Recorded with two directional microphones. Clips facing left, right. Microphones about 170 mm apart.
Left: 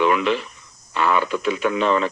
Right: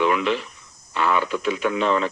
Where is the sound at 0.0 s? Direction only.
65° left (ahead or behind).